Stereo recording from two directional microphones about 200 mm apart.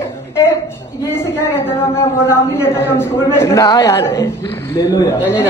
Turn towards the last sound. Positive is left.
turn(degrees=20)  # may be behind; listen again after turning